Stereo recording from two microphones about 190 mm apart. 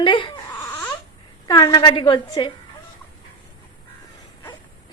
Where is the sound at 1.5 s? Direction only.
20° left (ahead or behind).